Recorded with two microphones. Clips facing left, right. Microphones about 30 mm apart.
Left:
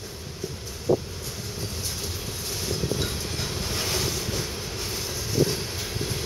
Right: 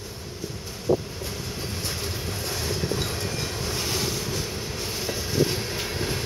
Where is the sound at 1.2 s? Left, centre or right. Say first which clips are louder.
Right 3 dB; right.